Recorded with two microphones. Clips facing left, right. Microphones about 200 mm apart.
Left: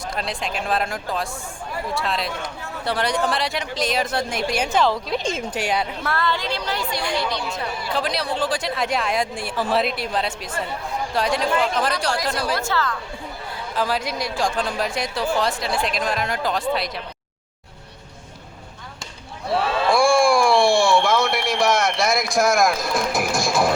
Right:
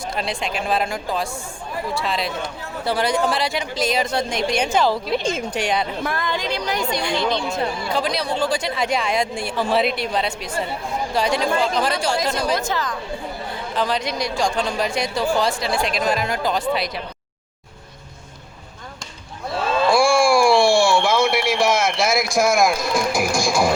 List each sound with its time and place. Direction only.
0.2 s speech: centre (ahead or behind)
6.0 s a woman's voice: 15° right (ahead or behind)
7.9 s speech: centre (ahead or behind)
12.5 s a woman's voice: 15° right (ahead or behind)
13.7 s speech: 5° left (ahead or behind)
19.5 s a sound: 65° left (ahead or behind)
19.9 s speech: centre (ahead or behind)